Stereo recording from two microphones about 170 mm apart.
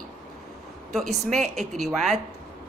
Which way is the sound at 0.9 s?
Centre (ahead or behind).